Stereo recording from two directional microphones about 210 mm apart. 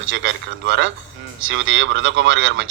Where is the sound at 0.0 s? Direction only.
60° right (ahead or behind).